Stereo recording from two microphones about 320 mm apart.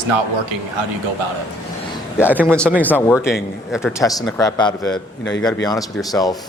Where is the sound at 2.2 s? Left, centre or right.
Centre.